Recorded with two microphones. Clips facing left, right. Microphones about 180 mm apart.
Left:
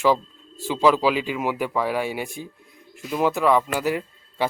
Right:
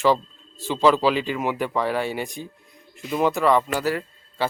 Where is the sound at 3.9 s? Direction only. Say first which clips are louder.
Even; 15° left (ahead or behind).